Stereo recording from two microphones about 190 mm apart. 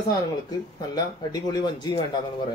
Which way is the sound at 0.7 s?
20° left (ahead or behind).